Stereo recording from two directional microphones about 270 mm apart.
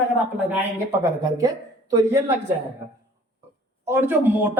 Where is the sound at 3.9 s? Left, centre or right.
Centre.